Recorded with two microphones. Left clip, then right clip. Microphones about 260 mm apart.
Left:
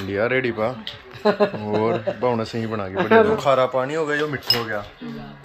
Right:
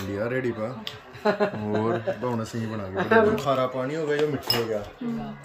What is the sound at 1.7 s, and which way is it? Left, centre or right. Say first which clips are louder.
Speech: left 6 dB; centre.